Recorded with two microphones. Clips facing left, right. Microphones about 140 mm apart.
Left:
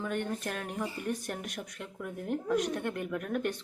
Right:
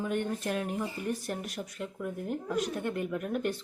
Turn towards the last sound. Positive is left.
turn(degrees=-5)  # may be behind; listen again after turning